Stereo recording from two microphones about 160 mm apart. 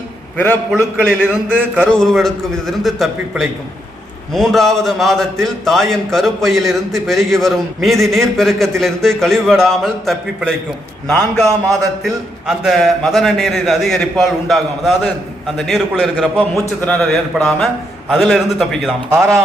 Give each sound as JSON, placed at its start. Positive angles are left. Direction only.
{"t": 0.3, "sound": "a man's voice", "side_deg": 10}
{"t": 0.8, "sound": "a man's voice", "side_deg": -10}
{"t": 1.8, "sound": "a man's voice", "side_deg": 5}
{"t": 16.4, "sound": "a man's voice", "side_deg": 10}
{"t": 19.1, "sound": "a man's voice", "side_deg": -20}